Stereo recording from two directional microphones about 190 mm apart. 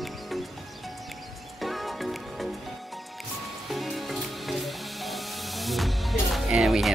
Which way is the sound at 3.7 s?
Centre (ahead or behind).